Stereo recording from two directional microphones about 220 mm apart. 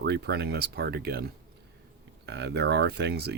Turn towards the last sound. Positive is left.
turn(degrees=-50)  # may be behind; listen again after turning